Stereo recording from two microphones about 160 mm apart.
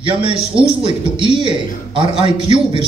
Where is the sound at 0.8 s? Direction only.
30° right (ahead or behind).